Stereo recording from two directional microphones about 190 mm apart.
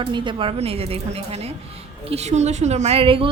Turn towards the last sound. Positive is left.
turn(degrees=-30)  # may be behind; listen again after turning